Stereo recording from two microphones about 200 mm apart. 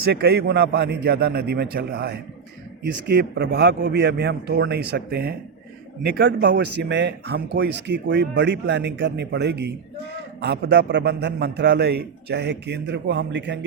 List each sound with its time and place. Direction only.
0.0 s speech: 55° right (ahead or behind)